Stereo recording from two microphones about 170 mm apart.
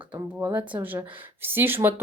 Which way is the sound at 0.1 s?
10° right (ahead or behind).